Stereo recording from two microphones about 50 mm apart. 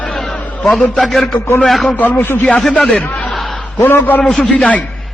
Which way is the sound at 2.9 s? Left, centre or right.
Left.